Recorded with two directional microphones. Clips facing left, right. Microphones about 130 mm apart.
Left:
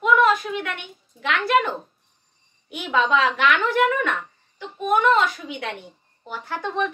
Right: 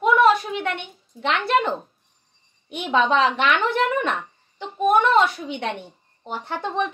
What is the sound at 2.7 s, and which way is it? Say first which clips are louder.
A woman's voice: right 1 dB; 25° right (ahead or behind).